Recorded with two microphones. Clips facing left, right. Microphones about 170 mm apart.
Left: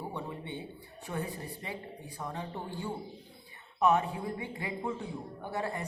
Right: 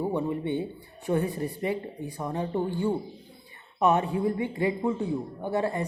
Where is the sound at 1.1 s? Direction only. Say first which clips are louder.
Right 10 dB; 60° right (ahead or behind).